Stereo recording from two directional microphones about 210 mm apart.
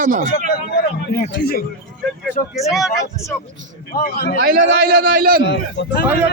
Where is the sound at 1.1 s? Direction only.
45° left (ahead or behind).